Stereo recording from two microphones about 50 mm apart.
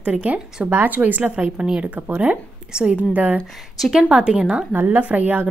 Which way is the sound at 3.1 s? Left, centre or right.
Right.